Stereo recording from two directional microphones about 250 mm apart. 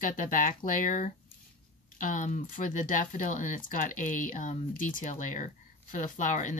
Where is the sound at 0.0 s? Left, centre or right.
Left.